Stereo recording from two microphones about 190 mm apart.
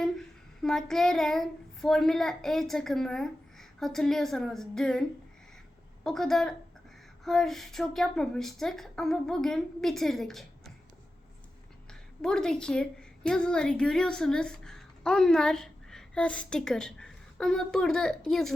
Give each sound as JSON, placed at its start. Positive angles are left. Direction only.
{"t": 0.0, "sound": "child singing", "side_deg": 0}
{"t": 6.0, "sound": "a woman's voice", "side_deg": 0}
{"t": 11.9, "sound": "a woman's voice", "side_deg": 5}